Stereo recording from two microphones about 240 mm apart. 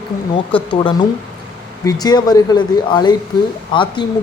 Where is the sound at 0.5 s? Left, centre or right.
Centre.